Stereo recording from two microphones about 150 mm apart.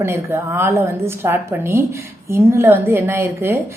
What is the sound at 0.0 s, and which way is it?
A woman's voice, 15° right (ahead or behind).